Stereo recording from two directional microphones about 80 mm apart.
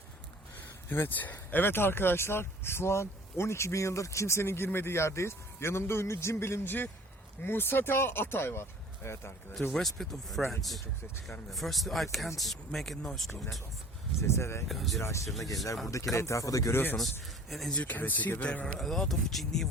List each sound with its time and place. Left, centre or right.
0.9 s speech: left
9.7 s speech: centre
14.2 s speech: left
14.7 s speech: centre
15.0 s speech: left
16.7 s speech: left
17.5 s speech: centre
17.7 s speech: left
18.6 s speech: centre